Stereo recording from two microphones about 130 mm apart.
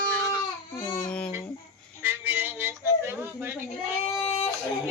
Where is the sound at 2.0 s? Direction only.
15° right (ahead or behind).